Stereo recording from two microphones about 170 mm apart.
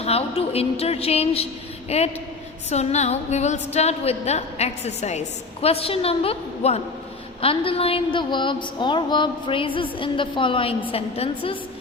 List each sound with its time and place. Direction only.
0.0 s a woman's voice: 35° left (ahead or behind)